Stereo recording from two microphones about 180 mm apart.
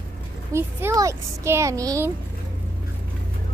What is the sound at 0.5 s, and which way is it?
A child's voice, 15° right (ahead or behind).